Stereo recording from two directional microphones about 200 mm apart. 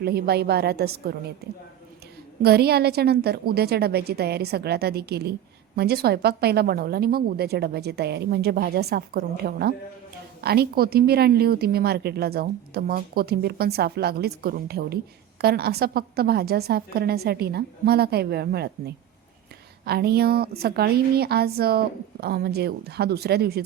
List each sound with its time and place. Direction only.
0.0 s a woman's voice: 50° right (ahead or behind)
2.4 s a woman's voice: 50° right (ahead or behind)